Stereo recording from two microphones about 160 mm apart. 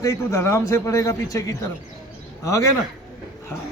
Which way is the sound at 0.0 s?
20° left (ahead or behind).